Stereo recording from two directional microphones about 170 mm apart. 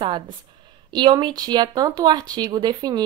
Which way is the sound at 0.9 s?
25° right (ahead or behind).